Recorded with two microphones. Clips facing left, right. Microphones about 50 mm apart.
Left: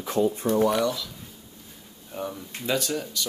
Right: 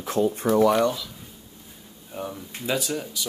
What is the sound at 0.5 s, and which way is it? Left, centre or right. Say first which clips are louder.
Speech: right 4 dB; right.